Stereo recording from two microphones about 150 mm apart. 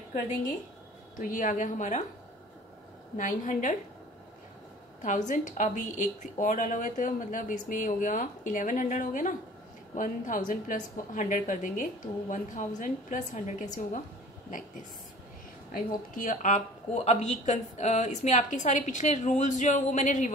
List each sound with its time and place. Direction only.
1.1 s a woman's voice: 60° left (ahead or behind)
3.2 s a woman's voice: 60° left (ahead or behind)
5.0 s a woman's voice: 55° left (ahead or behind)
16.2 s speech: 60° left (ahead or behind)